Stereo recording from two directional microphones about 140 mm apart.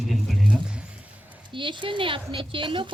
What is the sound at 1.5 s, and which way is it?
Speech, 35° right (ahead or behind).